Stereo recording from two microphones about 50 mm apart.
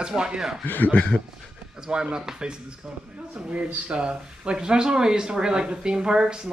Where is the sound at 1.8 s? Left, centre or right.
Centre.